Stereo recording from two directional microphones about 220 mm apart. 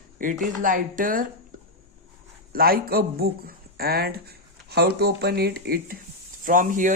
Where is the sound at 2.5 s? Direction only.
45° right (ahead or behind).